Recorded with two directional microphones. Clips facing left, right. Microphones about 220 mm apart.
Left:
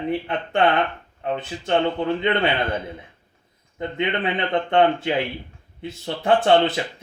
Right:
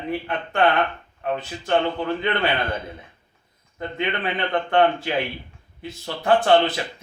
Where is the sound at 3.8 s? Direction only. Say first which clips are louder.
Left 2 dB; 20° left (ahead or behind).